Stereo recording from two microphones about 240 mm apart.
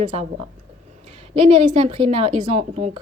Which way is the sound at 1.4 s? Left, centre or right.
Right.